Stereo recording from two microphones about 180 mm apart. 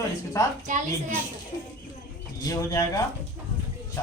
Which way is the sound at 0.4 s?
15° left (ahead or behind).